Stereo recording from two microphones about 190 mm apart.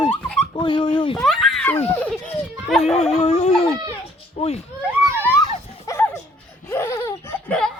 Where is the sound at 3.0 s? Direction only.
35° left (ahead or behind).